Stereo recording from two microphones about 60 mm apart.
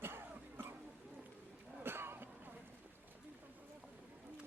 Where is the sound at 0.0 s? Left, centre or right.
Right.